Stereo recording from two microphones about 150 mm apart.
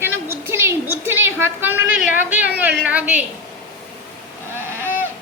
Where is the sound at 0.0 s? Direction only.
15° right (ahead or behind).